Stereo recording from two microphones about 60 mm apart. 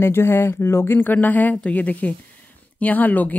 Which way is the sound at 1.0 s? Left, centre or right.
Left.